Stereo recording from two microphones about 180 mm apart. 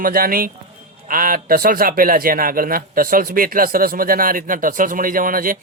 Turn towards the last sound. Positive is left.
turn(degrees=-50)  # may be behind; listen again after turning